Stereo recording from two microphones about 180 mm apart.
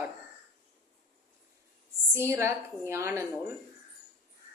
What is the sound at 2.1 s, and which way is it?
A woman's voice, 15° right (ahead or behind).